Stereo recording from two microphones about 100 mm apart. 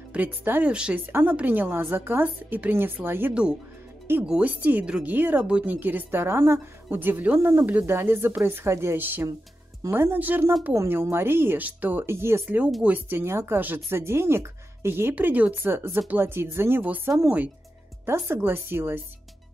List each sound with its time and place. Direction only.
0.1 s a woman's voice: 15° right (ahead or behind)